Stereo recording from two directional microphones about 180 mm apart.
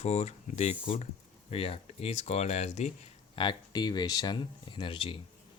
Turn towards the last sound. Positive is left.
turn(degrees=30)  # may be behind; listen again after turning